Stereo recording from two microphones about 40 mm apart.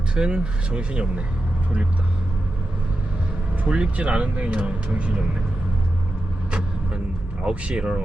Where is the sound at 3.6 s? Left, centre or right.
Right.